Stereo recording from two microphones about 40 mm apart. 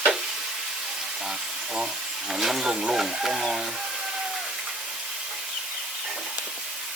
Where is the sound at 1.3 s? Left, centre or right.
Centre.